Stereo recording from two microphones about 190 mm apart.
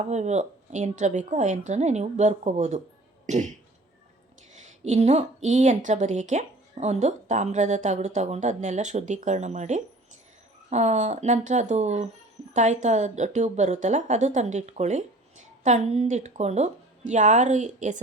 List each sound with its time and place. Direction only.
0.1 s a woman's voice: 35° right (ahead or behind)
3.2 s cough: 40° right (ahead or behind)
4.5 s a woman's voice: 40° right (ahead or behind)